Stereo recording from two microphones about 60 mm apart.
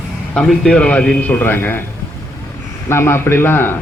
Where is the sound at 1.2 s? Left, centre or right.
Left.